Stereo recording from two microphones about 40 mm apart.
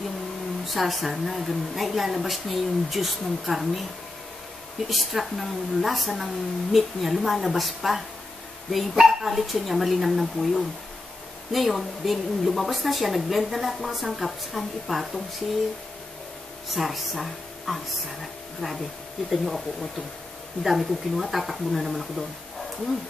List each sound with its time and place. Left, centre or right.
0.7 s a woman's voice: centre
4.8 s a woman's voice: centre
16.7 s a woman's voice: centre